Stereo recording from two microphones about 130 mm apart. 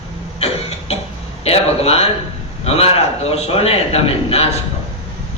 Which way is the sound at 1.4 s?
50° left (ahead or behind).